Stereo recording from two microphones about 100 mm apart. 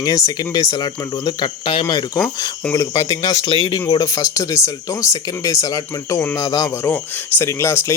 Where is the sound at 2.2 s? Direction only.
30° left (ahead or behind).